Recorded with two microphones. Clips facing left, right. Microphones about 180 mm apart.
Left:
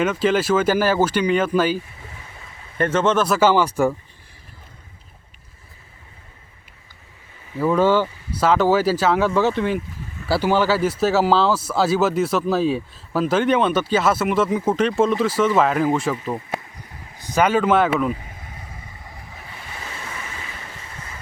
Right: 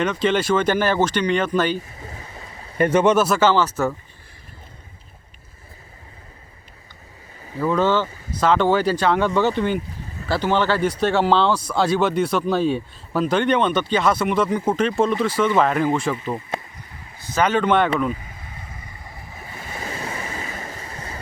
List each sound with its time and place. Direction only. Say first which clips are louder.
0.0 s speech: left 1 dB; 5° left (ahead or behind)
2.0 s stream: right 4 dB; 40° right (ahead or behind)
2.7 s speech: right 2 dB; 15° right (ahead or behind)
3.2 s speech: left 1 dB; 5° left (ahead or behind)
7.6 s speech: left 2 dB; 10° left (ahead or behind)
17.2 s speech: left 2 dB; 15° left (ahead or behind)
19.5 s waves: right 5 dB; 40° right (ahead or behind)